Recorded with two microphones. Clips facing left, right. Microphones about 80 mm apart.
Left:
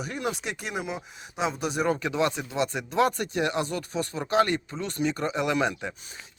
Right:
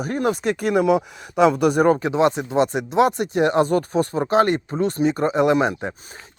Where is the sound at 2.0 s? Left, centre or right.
Right.